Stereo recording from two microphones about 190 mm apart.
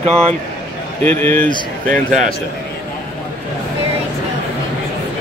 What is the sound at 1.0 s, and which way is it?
Speech, 10° left (ahead or behind).